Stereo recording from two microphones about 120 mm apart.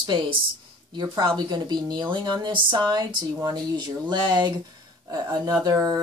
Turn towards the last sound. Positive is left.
turn(degrees=-30)  # may be behind; listen again after turning